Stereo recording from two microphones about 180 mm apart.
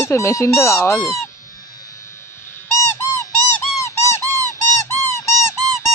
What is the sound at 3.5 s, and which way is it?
Squeak, 15° left (ahead or behind).